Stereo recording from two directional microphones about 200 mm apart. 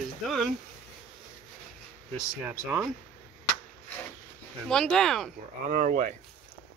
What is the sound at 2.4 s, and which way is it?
Speech, 10° right (ahead or behind).